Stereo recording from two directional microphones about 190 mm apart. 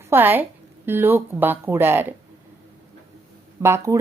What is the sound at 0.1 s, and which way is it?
Speech, 10° right (ahead or behind).